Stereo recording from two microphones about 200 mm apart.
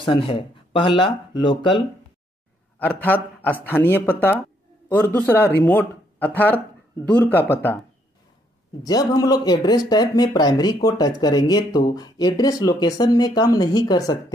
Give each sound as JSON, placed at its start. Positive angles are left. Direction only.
{"t": 0.0, "sound": "speech", "side_deg": 25}
{"t": 2.8, "sound": "speech", "side_deg": 10}
{"t": 8.8, "sound": "speech", "side_deg": 20}